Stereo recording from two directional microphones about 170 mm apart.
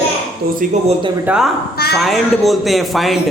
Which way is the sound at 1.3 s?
5° right (ahead or behind).